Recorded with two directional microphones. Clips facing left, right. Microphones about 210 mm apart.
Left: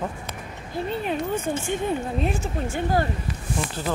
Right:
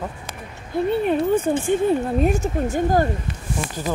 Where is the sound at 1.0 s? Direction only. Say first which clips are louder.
Right 8 dB; 55° right (ahead or behind).